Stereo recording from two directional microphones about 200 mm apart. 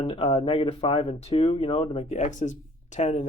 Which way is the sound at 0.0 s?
30° left (ahead or behind).